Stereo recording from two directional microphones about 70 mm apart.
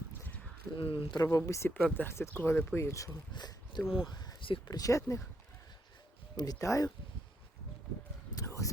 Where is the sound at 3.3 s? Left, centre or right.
Left.